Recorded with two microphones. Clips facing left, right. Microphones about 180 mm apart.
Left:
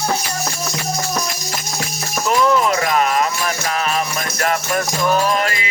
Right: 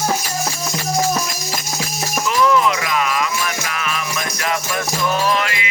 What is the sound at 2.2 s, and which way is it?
Music, 45° left (ahead or behind).